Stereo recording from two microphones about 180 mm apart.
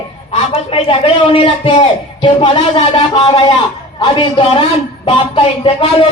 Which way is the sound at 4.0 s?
25° left (ahead or behind).